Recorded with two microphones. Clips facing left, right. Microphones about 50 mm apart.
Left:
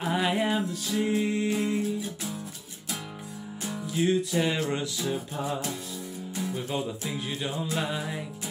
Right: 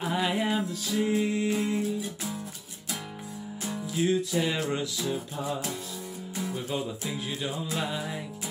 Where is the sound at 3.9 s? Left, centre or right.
Centre.